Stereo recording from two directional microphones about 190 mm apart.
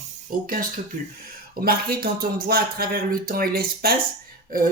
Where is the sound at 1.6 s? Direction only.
50° right (ahead or behind).